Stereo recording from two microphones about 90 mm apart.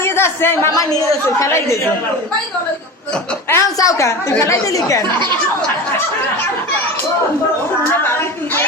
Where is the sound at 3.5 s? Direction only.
30° left (ahead or behind).